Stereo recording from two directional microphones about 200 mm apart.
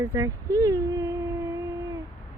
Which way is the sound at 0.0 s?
15° right (ahead or behind).